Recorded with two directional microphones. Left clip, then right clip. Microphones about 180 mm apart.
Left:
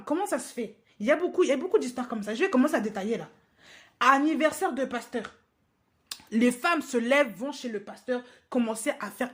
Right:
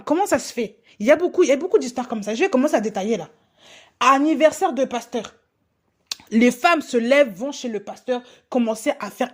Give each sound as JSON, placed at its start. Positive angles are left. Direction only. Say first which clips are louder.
{"t": 0.0, "sound": "a woman's voice", "louder": "right 9 dB", "side_deg": -45}